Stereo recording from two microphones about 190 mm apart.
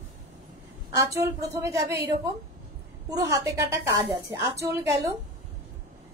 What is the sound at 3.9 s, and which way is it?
Speech, 30° right (ahead or behind).